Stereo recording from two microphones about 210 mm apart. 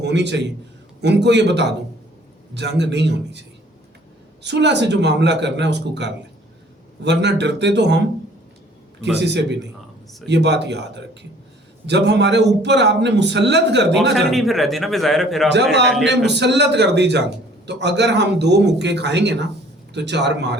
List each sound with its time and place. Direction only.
0.0 s a man's voice: 55° right (ahead or behind)
4.4 s a man's voice: 55° right (ahead or behind)
9.1 s a man's voice: 55° right (ahead or behind)
14.0 s speech: centre (ahead or behind)
16.0 s a man's voice: 55° right (ahead or behind)